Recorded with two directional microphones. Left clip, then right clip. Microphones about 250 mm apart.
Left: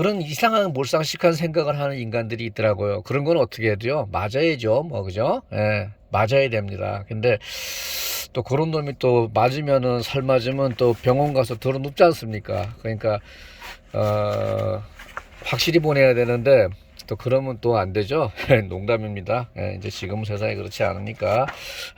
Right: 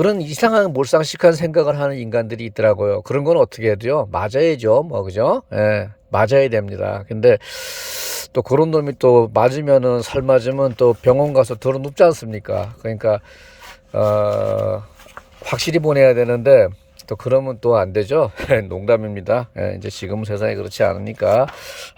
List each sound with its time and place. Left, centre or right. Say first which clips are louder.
0.0 s speech: right 4 dB; right